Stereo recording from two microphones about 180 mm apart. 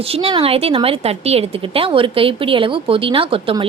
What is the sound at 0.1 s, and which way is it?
A woman's voice, 35° right (ahead or behind).